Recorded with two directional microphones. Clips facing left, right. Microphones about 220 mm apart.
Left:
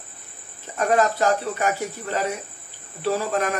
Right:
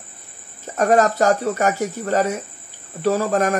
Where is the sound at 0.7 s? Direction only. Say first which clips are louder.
Right 4 dB; 45° right (ahead or behind).